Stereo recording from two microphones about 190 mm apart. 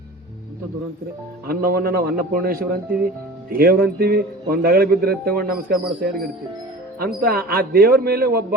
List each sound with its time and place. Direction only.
1.5 s a man's voice: 55° right (ahead or behind)